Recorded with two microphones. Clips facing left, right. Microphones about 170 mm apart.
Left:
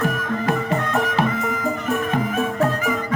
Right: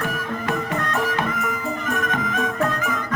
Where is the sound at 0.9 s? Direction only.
30° left (ahead or behind).